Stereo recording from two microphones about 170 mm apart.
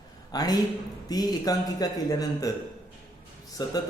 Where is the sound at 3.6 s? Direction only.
25° left (ahead or behind).